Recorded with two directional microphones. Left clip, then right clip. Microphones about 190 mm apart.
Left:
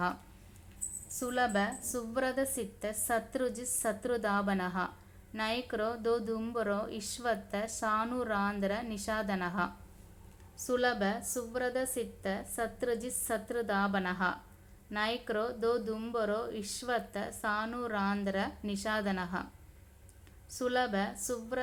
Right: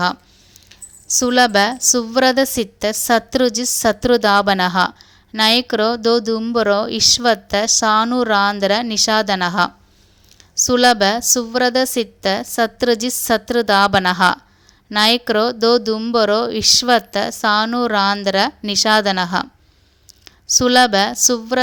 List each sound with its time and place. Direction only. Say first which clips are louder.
1.2 s a woman's voice: right 18 dB; 45° right (ahead or behind)
10.7 s a woman's voice: right 17 dB; 45° right (ahead or behind)